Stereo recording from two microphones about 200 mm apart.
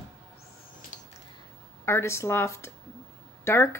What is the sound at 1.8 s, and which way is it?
Speech, 15° left (ahead or behind).